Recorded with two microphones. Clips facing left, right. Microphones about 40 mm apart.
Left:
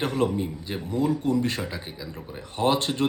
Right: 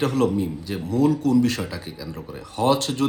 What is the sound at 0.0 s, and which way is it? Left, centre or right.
Speech, left.